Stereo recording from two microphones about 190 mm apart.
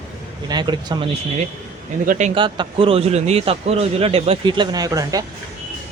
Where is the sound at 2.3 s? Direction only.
25° right (ahead or behind).